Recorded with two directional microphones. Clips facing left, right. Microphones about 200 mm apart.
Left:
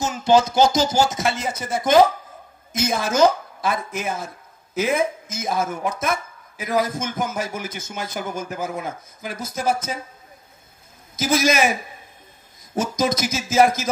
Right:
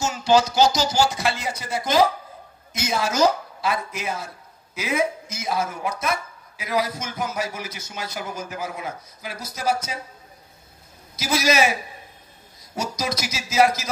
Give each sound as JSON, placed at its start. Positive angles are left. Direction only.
{"t": 0.0, "sound": "speech", "side_deg": 50}
{"t": 11.1, "sound": "speech", "side_deg": 50}